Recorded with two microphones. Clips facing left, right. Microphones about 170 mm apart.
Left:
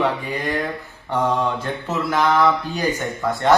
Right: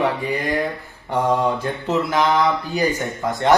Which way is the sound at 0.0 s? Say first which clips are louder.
Right 1 dB; 10° right (ahead or behind).